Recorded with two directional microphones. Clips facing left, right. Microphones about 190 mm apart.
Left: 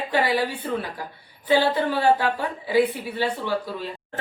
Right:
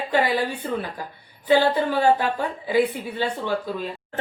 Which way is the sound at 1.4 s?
15° right (ahead or behind).